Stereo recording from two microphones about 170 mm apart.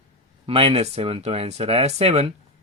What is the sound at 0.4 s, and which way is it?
Speech, 35° right (ahead or behind).